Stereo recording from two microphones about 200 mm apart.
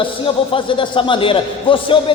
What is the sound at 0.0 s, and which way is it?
A man's voice, 25° left (ahead or behind).